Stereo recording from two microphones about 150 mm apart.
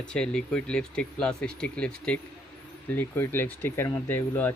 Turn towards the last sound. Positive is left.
turn(degrees=15)  # may be behind; listen again after turning